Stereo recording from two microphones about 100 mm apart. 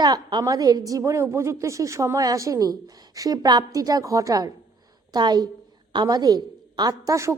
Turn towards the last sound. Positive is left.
turn(degrees=-30)  # may be behind; listen again after turning